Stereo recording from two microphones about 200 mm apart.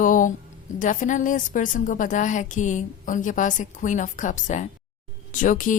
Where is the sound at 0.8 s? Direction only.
40° left (ahead or behind).